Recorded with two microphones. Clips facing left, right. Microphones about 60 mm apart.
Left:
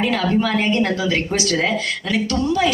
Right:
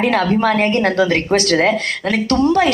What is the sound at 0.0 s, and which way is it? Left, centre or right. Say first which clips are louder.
Speech: right 4 dB; right.